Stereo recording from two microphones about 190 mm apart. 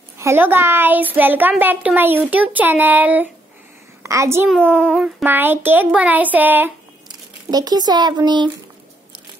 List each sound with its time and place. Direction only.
0.2 s a child's voice: 10° right (ahead or behind)
7.5 s speech: 20° right (ahead or behind)